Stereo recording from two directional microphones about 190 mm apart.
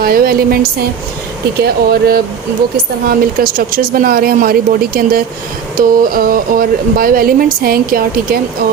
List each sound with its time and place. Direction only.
0.0 s speech: 50° right (ahead or behind)
1.6 s speech: 55° right (ahead or behind)